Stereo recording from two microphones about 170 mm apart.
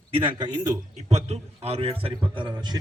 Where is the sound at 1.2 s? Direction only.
40° right (ahead or behind).